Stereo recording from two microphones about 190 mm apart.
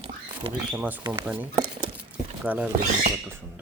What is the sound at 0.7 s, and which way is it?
Speech, 10° right (ahead or behind).